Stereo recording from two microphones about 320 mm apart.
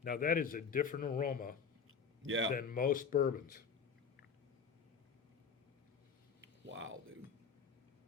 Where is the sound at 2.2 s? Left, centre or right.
Right.